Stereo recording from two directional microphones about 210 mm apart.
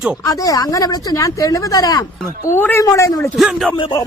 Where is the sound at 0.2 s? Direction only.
15° left (ahead or behind).